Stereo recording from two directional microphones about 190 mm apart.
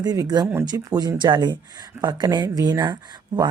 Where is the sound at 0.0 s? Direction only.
20° right (ahead or behind).